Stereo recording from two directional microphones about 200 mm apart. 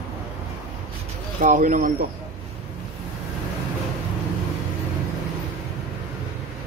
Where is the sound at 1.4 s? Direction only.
40° right (ahead or behind).